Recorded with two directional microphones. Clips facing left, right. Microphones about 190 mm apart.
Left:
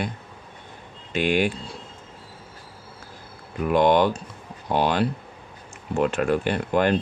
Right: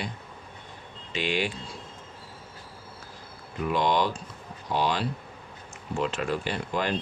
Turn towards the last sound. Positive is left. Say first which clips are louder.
# left 8 dB
turn(degrees=55)  # may be behind; listen again after turning